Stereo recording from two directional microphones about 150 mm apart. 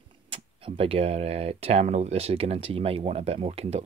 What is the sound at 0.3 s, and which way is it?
Speech, 40° right (ahead or behind).